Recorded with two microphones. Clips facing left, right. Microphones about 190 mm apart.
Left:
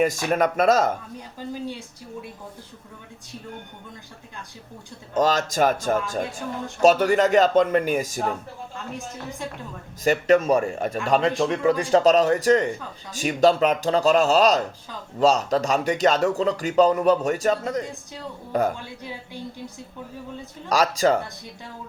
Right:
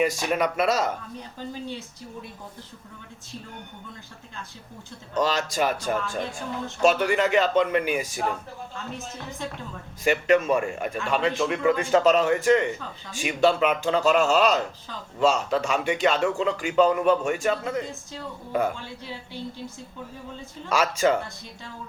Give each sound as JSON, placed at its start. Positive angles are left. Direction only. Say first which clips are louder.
{"t": 0.0, "sound": "speech", "louder": "left 3 dB", "side_deg": 45}
{"t": 5.1, "sound": "speech", "louder": "left 3 dB", "side_deg": 45}
{"t": 10.0, "sound": "a man's voice", "louder": "left 2 dB", "side_deg": 40}
{"t": 20.7, "sound": "a man's voice", "louder": "left 2 dB", "side_deg": 35}